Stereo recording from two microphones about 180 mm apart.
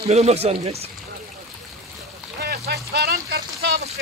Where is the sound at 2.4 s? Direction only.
65° right (ahead or behind).